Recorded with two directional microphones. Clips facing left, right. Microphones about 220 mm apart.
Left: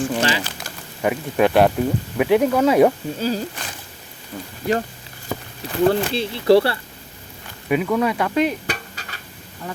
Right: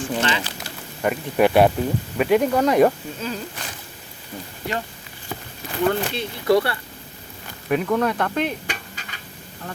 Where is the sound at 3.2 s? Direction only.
35° left (ahead or behind).